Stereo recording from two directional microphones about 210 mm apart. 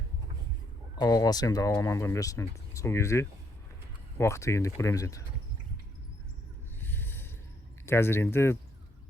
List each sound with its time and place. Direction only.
0.9 s speech: 20° left (ahead or behind)
6.7 s a sound: 10° left (ahead or behind)
7.9 s speech: 10° left (ahead or behind)